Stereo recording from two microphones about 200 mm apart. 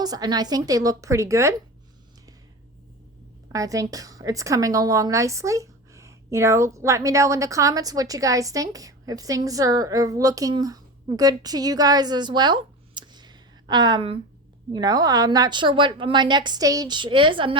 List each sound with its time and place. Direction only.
0.0 s a woman's voice: 20° right (ahead or behind)
3.5 s a woman's voice: 15° right (ahead or behind)